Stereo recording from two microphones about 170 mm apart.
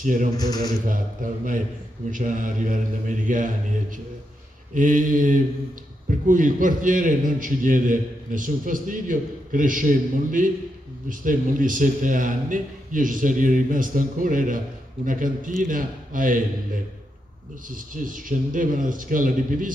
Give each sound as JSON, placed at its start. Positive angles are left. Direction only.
{"t": 0.0, "sound": "a man's voice", "side_deg": -50}
{"t": 0.4, "sound": "a man's voice", "side_deg": 20}
{"t": 0.8, "sound": "a man's voice", "side_deg": -50}
{"t": 4.7, "sound": "a man's voice", "side_deg": -50}
{"t": 17.6, "sound": "a man's voice", "side_deg": -55}